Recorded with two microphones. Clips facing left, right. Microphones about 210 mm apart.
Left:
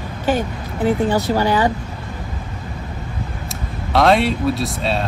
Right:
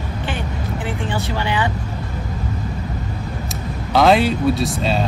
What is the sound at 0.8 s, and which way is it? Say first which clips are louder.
Speech: left 10 dB; 40° left (ahead or behind).